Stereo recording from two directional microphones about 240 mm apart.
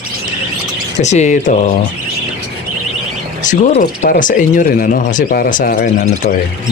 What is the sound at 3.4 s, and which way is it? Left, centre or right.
Speech, left.